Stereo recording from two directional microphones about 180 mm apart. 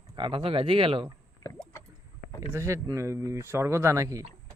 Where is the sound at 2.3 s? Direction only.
15° right (ahead or behind).